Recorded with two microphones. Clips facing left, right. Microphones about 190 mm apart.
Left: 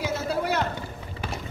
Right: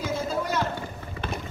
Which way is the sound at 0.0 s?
65° left (ahead or behind).